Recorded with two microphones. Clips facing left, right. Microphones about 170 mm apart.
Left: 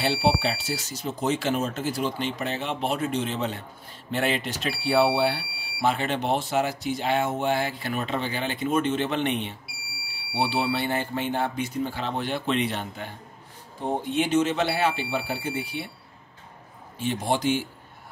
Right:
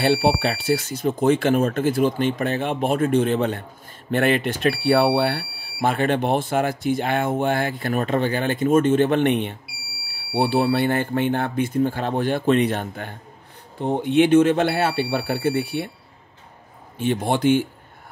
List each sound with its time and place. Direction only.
0.0 s speech: 55° right (ahead or behind)
14.0 s speech: 65° right (ahead or behind)
17.0 s speech: 55° right (ahead or behind)